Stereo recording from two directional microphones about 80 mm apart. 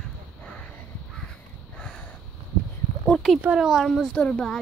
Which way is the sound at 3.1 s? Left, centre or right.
Centre.